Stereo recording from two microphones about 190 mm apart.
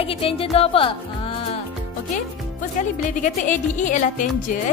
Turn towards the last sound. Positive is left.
turn(degrees=45)  # may be behind; listen again after turning